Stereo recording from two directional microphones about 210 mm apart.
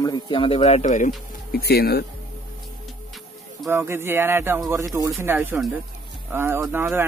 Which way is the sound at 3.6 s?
10° right (ahead or behind).